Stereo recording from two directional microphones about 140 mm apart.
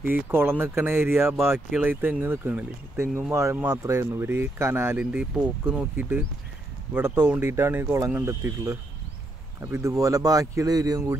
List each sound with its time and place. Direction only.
0.0 s speech: 15° right (ahead or behind)